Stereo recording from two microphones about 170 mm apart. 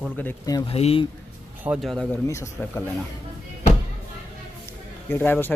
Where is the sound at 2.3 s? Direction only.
15° left (ahead or behind).